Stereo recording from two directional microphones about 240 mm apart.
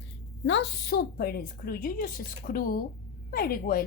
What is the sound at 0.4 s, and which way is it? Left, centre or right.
A woman's voice, left.